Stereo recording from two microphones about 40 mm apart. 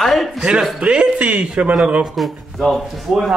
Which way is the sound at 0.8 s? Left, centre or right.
Right.